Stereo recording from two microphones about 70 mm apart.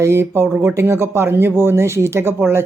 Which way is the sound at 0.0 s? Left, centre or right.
Right.